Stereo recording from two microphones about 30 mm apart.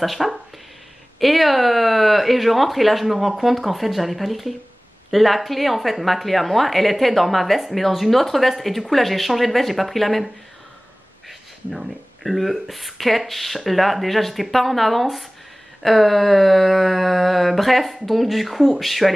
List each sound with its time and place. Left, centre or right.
0.0 s speech: centre
12.2 s speech: centre